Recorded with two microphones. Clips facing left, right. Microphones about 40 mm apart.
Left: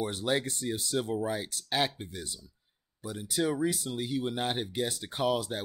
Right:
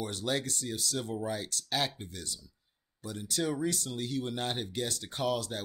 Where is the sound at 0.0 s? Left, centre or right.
Centre.